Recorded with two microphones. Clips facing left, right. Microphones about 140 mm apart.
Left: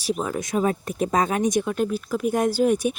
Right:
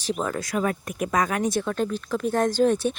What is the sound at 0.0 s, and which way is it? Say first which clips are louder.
Speech: left 1 dB; 10° left (ahead or behind).